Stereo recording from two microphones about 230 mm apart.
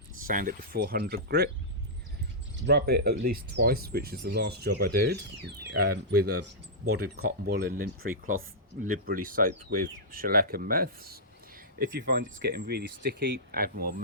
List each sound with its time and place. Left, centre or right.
0.3 s speech: right
2.6 s speech: right